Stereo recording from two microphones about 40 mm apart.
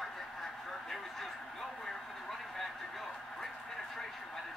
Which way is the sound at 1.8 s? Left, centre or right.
Centre.